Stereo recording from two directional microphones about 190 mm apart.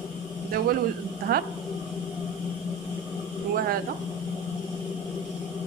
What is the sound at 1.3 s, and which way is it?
Speech, 55° right (ahead or behind).